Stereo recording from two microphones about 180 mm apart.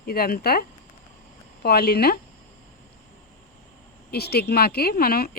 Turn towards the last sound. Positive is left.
turn(degrees=55)  # may be behind; listen again after turning